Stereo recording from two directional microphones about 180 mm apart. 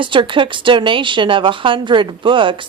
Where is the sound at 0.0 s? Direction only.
25° right (ahead or behind).